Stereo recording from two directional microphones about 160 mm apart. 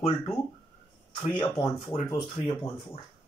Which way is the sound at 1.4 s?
30° left (ahead or behind).